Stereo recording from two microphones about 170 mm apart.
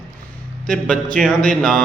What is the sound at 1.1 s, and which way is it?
Speech, centre (ahead or behind).